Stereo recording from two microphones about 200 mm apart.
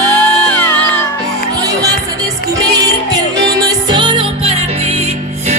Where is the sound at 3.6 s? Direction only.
25° right (ahead or behind).